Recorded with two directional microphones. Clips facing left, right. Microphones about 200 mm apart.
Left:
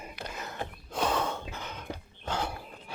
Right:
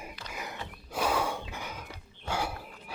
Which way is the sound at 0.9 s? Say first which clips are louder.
Even; 10° right (ahead or behind).